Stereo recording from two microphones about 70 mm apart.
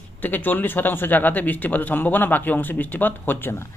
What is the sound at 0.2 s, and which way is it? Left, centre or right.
Speech, left.